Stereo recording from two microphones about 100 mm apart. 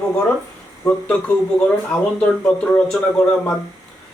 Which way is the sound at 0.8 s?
10° left (ahead or behind).